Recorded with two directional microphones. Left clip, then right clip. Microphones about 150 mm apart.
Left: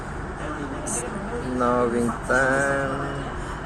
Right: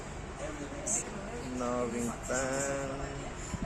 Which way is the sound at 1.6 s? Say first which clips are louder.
Left 13 dB; 5° left (ahead or behind).